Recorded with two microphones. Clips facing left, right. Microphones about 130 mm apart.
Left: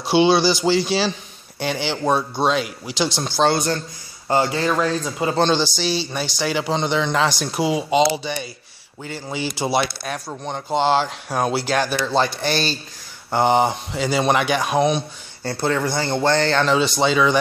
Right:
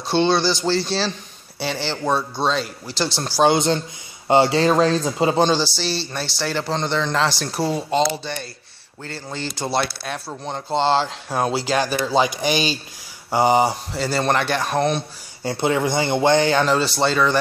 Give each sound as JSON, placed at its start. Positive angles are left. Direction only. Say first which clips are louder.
{"t": 0.1, "sound": "speech", "louder": "left 3 dB", "side_deg": 5}
{"t": 3.5, "sound": "speech", "louder": "right 3 dB", "side_deg": -20}
{"t": 5.3, "sound": "speech", "louder": "left 3 dB", "side_deg": -5}
{"t": 9.8, "sound": "speech", "louder": "left 1 dB", "side_deg": -5}
{"t": 15.4, "sound": "speech", "louder": "right 1 dB", "side_deg": -15}